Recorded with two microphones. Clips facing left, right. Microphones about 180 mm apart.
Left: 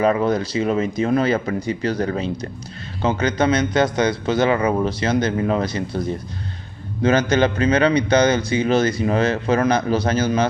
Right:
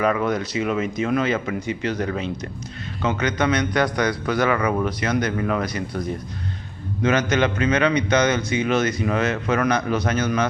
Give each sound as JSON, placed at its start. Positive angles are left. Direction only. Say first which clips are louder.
{"t": 0.0, "sound": "a man's voice", "louder": "left 3 dB", "side_deg": 30}